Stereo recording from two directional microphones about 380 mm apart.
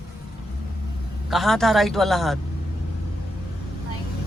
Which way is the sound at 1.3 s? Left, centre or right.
Centre.